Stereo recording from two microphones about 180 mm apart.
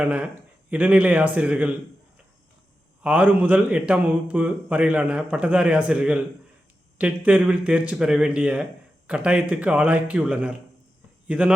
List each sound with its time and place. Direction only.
0.0 s a man's voice: 5° right (ahead or behind)
3.0 s a man's voice: 10° right (ahead or behind)